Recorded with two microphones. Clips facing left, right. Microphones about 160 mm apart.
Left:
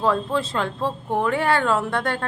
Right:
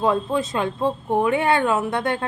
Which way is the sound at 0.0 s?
20° right (ahead or behind).